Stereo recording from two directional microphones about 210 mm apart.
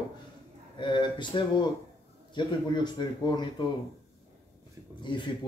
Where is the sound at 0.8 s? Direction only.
20° left (ahead or behind).